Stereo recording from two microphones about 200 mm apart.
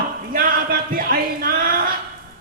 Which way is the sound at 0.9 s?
45° right (ahead or behind).